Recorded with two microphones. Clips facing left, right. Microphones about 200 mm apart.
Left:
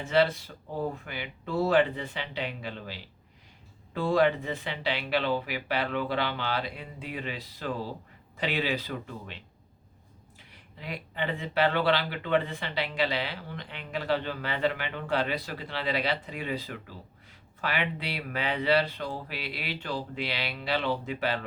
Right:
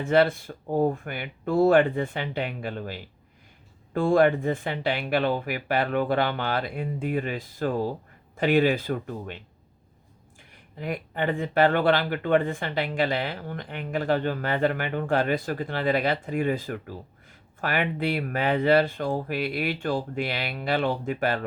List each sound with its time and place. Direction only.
0.0 s speech: 50° right (ahead or behind)
10.5 s speech: 50° right (ahead or behind)